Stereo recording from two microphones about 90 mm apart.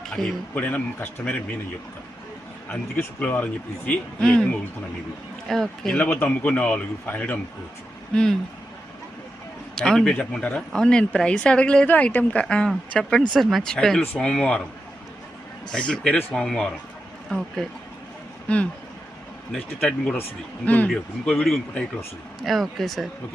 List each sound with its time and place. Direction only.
0.1 s speech: 15° left (ahead or behind)
2.9 s speech: 20° left (ahead or behind)
6.0 s speech: 25° left (ahead or behind)
8.1 s speech: 10° left (ahead or behind)
9.7 s speech: 5° left (ahead or behind)
15.7 s speech: 10° left (ahead or behind)
22.4 s speech: centre (ahead or behind)